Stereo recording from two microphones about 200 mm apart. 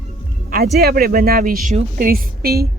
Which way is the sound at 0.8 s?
50° right (ahead or behind).